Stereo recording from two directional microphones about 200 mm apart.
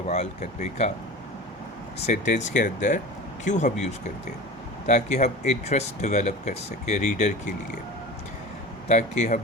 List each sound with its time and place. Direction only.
0.1 s speech: 35° left (ahead or behind)
2.0 s speech: 35° left (ahead or behind)
4.9 s speech: 35° left (ahead or behind)
8.9 s speech: 35° left (ahead or behind)